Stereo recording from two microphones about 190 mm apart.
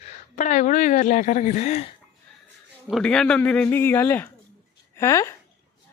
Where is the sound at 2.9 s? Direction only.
5° left (ahead or behind).